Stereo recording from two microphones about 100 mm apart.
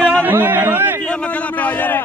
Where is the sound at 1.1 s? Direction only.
10° left (ahead or behind).